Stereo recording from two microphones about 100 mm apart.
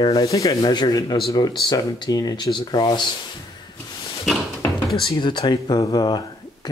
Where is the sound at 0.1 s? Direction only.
35° left (ahead or behind).